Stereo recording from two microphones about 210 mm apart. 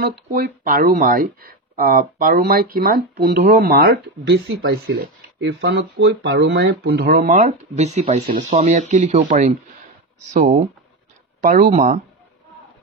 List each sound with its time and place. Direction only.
0.0 s speech: 45° right (ahead or behind)